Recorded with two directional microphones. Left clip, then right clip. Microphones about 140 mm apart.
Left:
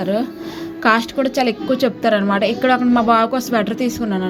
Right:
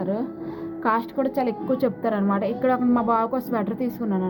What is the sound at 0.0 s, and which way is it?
Speech, 15° left (ahead or behind).